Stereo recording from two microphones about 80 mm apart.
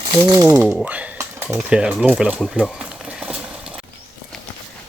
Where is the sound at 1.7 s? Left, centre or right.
Centre.